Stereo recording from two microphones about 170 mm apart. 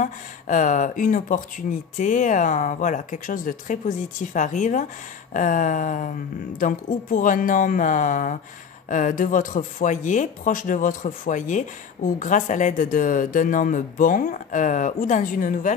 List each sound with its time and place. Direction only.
0.0 s speech: 50° left (ahead or behind)